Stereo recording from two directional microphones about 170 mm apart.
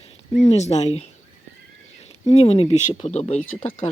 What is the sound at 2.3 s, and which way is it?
Speech, 35° left (ahead or behind).